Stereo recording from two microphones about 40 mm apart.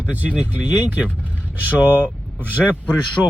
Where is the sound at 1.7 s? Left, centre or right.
Right.